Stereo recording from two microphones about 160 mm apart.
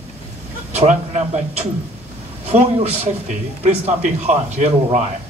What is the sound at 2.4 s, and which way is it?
Speech, 40° right (ahead or behind).